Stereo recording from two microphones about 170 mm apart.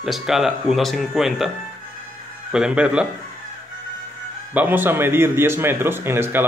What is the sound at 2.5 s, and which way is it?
Speech, 5° right (ahead or behind).